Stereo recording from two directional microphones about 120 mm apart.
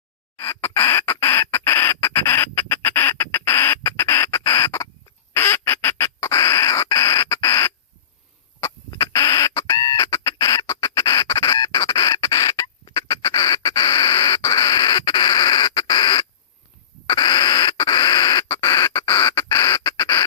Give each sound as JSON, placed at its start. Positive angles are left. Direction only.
{"t": 0.6, "sound": "rodents", "side_deg": 20}
{"t": 5.3, "sound": "duck", "side_deg": 20}
{"t": 8.9, "sound": "squawk", "side_deg": 25}
{"t": 12.8, "sound": "a sound", "side_deg": 30}
{"t": 19.2, "sound": "rodents", "side_deg": 20}